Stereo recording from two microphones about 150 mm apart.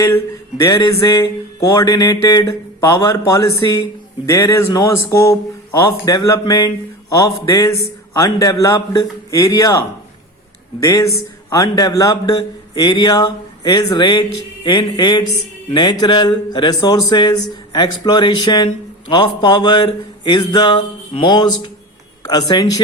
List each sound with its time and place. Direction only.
0.0 s speech: 20° left (ahead or behind)
10.8 s speech: 25° left (ahead or behind)
13.7 s a sound: 25° left (ahead or behind)
15.8 s speech: 25° left (ahead or behind)
19.1 s a sound: 30° left (ahead or behind)
22.3 s speech: 25° left (ahead or behind)